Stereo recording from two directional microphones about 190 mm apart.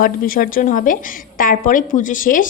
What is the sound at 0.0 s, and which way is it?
A woman's voice, 45° left (ahead or behind).